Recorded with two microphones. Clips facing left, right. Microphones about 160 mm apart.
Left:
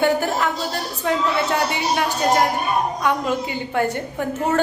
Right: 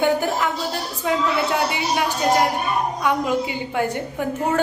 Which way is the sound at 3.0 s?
10° right (ahead or behind).